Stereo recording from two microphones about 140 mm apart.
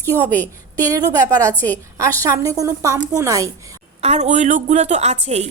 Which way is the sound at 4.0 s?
50° right (ahead or behind).